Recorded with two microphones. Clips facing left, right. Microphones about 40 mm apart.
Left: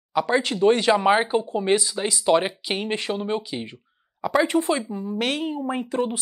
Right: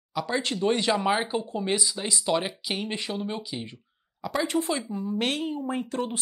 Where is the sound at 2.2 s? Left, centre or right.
Left.